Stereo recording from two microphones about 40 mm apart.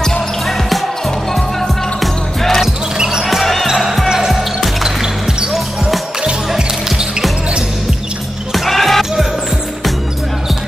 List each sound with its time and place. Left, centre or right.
0.0 s basketball bounce: centre
1.3 s music: centre
3.0 s basketball bounce: centre
3.3 s basketball bounce: centre
5.0 s basketball bounce: centre
6.5 s basketball bounce: centre
8.6 s music: centre